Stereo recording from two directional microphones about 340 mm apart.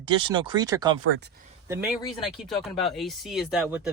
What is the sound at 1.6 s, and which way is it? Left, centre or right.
Speech, centre.